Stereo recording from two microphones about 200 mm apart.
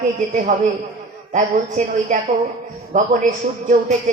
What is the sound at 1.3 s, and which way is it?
A man's voice, 35° right (ahead or behind).